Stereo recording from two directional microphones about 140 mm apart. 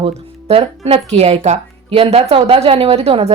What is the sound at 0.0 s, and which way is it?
Speech, 45° right (ahead or behind).